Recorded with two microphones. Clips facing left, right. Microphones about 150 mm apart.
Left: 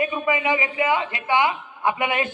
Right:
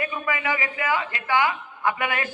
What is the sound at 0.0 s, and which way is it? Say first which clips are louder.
A man's voice: left 5 dB; 20° left (ahead or behind).